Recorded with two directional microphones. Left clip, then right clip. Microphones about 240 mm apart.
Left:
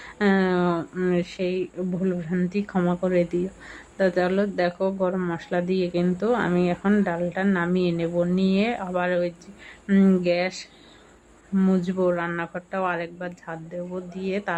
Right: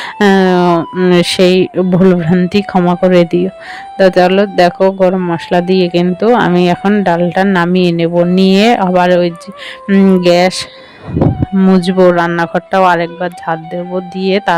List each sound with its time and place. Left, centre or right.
0.0 s speech: right